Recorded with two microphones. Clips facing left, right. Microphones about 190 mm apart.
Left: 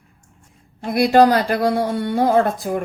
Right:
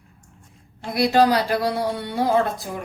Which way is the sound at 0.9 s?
50° left (ahead or behind).